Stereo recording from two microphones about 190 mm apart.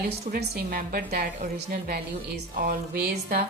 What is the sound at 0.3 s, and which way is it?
A woman's voice, 50° right (ahead or behind).